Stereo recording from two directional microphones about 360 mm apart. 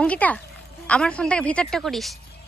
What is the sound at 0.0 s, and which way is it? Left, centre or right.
A woman's voice, centre.